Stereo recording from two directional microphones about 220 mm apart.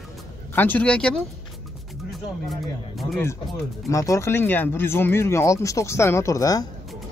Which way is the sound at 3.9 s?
15° left (ahead or behind).